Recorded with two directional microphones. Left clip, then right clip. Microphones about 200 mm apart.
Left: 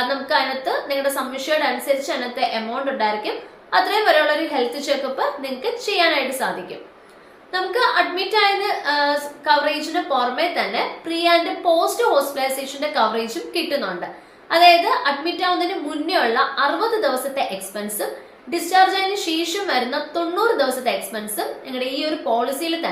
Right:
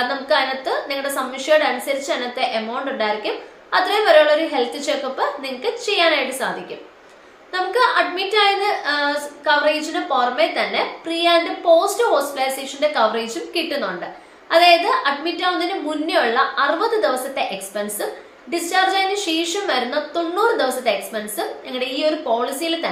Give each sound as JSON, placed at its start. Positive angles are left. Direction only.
{"t": 0.1, "sound": "a woman's voice", "side_deg": -5}